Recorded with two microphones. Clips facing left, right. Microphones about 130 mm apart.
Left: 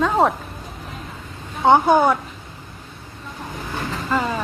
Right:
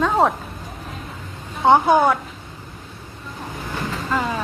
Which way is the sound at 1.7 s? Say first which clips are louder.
Even; centre (ahead or behind).